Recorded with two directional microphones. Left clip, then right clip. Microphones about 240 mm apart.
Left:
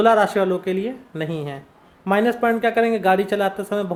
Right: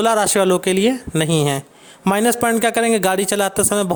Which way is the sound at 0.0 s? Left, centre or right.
Right.